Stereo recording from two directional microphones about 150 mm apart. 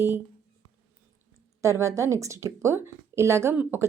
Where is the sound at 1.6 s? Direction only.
20° right (ahead or behind).